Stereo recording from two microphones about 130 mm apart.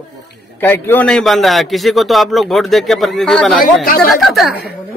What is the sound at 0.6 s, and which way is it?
Speech, 15° left (ahead or behind).